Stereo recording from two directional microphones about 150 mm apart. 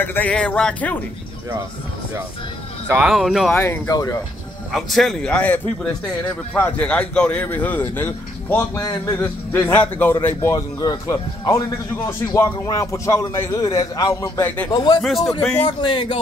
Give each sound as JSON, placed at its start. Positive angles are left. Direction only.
{"t": 0.0, "sound": "speech", "side_deg": 10}
{"t": 2.9, "sound": "a man's voice", "side_deg": -5}
{"t": 3.5, "sound": "speech", "side_deg": 15}
{"t": 4.7, "sound": "a man's voice", "side_deg": 0}
{"t": 15.0, "sound": "a man's voice", "side_deg": 0}
{"t": 15.8, "sound": "speech", "side_deg": 30}